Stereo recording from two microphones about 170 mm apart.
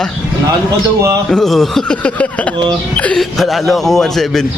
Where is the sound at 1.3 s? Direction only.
Centre (ahead or behind).